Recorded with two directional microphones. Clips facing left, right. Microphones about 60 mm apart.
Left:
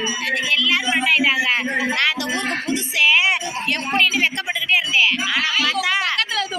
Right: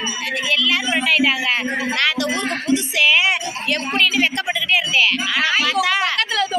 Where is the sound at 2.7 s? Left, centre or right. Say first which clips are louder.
Right 1 dB; left.